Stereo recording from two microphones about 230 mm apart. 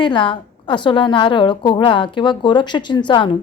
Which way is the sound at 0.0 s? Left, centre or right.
Left.